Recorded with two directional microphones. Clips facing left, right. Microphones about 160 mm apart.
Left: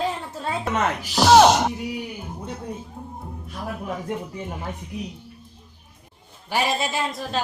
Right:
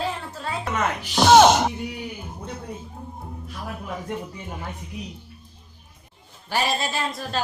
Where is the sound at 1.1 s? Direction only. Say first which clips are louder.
Even; centre (ahead or behind).